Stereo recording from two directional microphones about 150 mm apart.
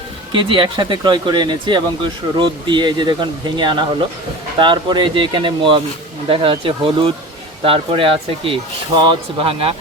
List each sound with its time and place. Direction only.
0.3 s speech: 35° right (ahead or behind)